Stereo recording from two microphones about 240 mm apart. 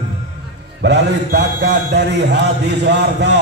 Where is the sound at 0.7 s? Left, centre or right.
Right.